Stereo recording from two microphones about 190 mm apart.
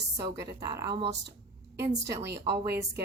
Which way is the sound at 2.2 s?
65° right (ahead or behind).